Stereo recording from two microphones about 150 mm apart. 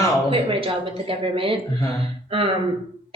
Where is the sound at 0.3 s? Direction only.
40° right (ahead or behind).